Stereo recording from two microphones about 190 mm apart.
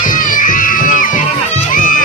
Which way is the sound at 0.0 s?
45° left (ahead or behind).